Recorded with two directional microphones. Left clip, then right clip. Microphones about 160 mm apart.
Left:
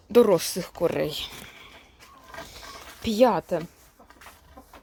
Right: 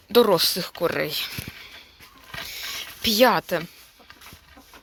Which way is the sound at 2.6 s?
5° left (ahead or behind).